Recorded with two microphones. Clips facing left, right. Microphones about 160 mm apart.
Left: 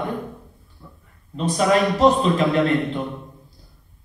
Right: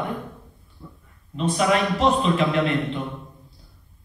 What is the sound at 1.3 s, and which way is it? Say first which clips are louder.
Speech: left 2 dB; 40° left (ahead or behind).